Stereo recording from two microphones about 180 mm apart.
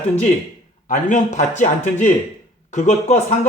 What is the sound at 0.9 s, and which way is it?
A man's voice, 45° left (ahead or behind).